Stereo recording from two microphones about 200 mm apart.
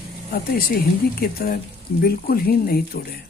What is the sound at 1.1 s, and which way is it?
Speech, 50° left (ahead or behind).